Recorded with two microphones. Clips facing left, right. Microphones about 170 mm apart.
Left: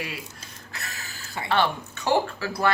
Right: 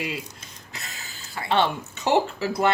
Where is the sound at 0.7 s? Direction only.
20° right (ahead or behind).